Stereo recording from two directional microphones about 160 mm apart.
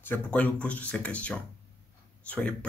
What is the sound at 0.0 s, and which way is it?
Speech, 10° left (ahead or behind).